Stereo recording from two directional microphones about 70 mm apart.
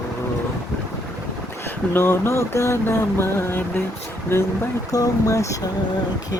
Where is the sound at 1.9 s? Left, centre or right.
Left.